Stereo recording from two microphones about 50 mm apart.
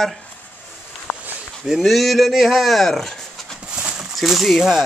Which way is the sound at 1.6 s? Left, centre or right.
Centre.